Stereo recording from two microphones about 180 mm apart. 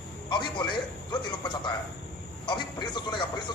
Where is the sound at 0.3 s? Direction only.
25° left (ahead or behind).